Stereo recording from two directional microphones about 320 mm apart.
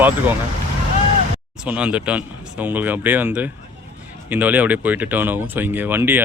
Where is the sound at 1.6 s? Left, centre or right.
Centre.